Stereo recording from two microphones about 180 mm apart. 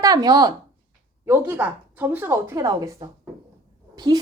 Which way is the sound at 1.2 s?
10° right (ahead or behind).